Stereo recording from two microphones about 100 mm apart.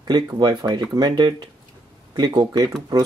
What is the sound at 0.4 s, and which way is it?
Speech, 50° right (ahead or behind).